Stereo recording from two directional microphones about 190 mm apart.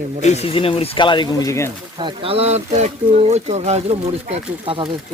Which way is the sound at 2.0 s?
25° right (ahead or behind).